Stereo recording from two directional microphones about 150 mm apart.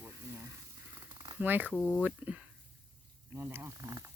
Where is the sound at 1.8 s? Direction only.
5° left (ahead or behind).